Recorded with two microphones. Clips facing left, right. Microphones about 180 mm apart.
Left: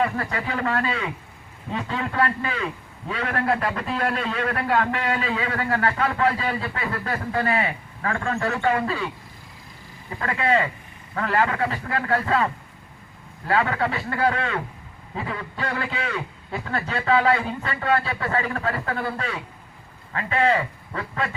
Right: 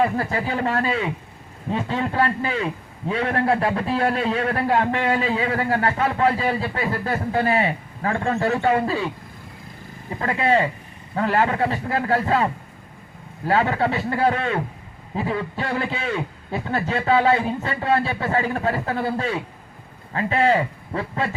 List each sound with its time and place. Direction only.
0.0 s a man's voice: 30° right (ahead or behind)
10.1 s a man's voice: 25° right (ahead or behind)